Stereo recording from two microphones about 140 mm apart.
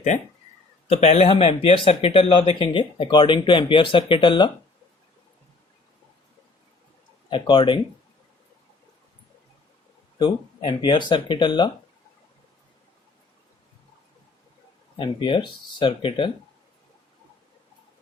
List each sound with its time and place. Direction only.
0.1 s a man's voice: 60° left (ahead or behind); by 4.5 s 35° left (ahead or behind)
7.3 s speech: 35° left (ahead or behind)
10.2 s speech: 35° left (ahead or behind)
14.9 s speech: 35° left (ahead or behind)